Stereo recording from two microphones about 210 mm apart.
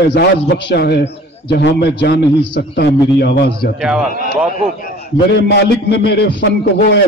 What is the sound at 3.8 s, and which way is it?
Speech, 5° right (ahead or behind).